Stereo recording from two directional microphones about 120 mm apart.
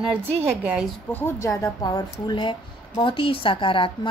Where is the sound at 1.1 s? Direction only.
20° left (ahead or behind).